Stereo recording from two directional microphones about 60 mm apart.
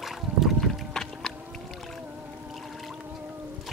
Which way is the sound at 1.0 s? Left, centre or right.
Centre.